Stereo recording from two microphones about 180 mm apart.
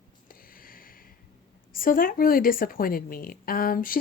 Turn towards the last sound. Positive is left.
turn(degrees=55)  # may be behind; listen again after turning